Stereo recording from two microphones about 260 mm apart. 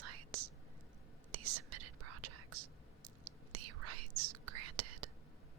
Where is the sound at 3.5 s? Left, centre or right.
Right.